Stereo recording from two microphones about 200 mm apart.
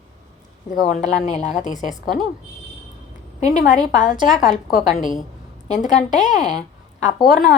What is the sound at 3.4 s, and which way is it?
Speech, 40° left (ahead or behind).